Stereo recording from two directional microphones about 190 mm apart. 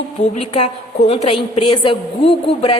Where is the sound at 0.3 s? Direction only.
30° left (ahead or behind).